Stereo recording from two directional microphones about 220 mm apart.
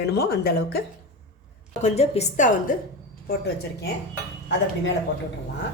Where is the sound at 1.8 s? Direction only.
30° left (ahead or behind).